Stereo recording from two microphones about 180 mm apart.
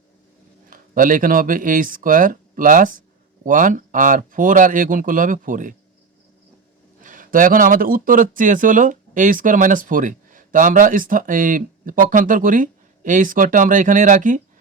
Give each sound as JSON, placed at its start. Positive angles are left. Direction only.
{"t": 0.7, "sound": "speech", "side_deg": -50}
{"t": 7.0, "sound": "speech", "side_deg": -45}